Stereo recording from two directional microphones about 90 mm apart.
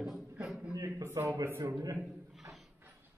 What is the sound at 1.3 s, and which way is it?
Speech, 30° right (ahead or behind).